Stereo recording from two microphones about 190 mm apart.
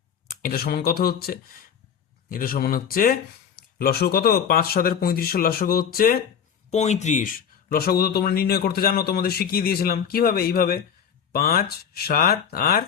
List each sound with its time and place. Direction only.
0.3 s speech: 55° left (ahead or behind)
6.7 s speech: 35° left (ahead or behind); by 12.8 s 50° left (ahead or behind)